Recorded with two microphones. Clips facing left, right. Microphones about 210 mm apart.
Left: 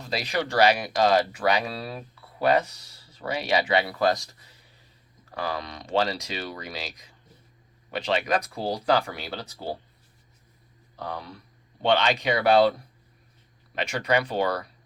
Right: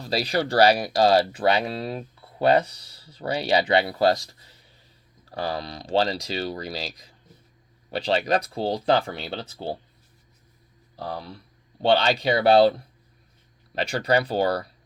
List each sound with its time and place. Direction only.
0.0 s speech: 35° right (ahead or behind)
10.9 s speech: 30° right (ahead or behind)
13.7 s speech: 35° right (ahead or behind)